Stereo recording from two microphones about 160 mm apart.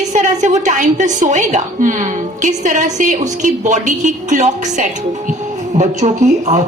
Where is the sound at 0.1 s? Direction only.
50° right (ahead or behind).